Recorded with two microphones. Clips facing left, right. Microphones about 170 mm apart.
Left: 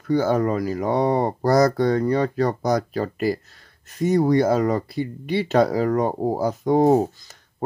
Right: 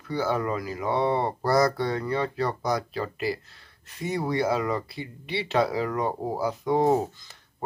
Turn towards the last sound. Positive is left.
turn(degrees=45)  # may be behind; listen again after turning